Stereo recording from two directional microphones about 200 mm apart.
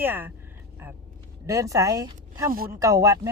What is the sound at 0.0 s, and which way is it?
Speech, 10° right (ahead or behind).